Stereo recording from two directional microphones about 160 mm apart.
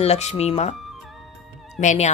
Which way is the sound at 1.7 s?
45° left (ahead or behind).